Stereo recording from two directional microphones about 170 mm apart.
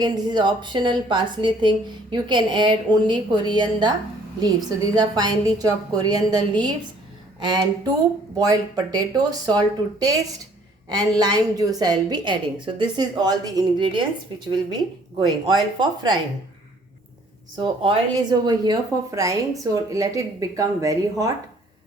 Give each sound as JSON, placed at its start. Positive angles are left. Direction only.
{"t": 0.0, "sound": "a woman's voice", "side_deg": -25}
{"t": 15.2, "sound": "a woman's voice", "side_deg": -25}
{"t": 17.6, "sound": "a woman's voice", "side_deg": -30}